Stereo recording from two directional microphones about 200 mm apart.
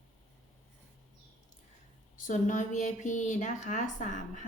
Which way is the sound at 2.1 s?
40° left (ahead or behind).